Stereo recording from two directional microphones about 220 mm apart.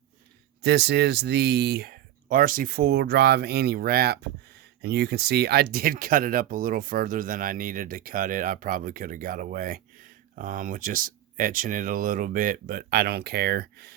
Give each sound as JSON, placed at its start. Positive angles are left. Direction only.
{"t": 0.6, "sound": "speech", "side_deg": -50}